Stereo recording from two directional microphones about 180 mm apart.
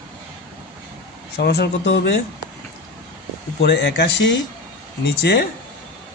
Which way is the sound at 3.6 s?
70° left (ahead or behind).